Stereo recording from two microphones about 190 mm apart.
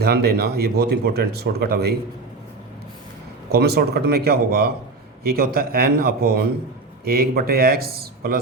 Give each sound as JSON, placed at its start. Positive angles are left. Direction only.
{"t": 0.0, "sound": "speech", "side_deg": -55}
{"t": 3.5, "sound": "speech", "side_deg": -55}